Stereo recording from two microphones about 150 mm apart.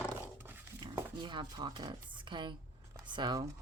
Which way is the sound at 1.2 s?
30° right (ahead or behind).